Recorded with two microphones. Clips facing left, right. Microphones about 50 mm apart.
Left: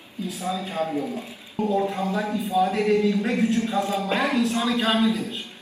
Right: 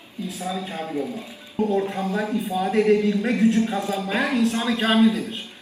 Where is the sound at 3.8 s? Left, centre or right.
Left.